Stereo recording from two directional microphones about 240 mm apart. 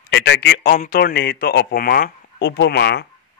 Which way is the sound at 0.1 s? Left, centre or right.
Left.